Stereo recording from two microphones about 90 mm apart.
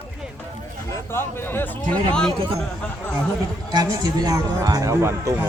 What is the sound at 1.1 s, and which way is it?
Speech, 25° left (ahead or behind).